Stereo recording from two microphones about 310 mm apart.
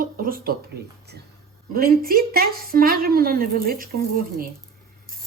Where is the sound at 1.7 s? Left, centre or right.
Right.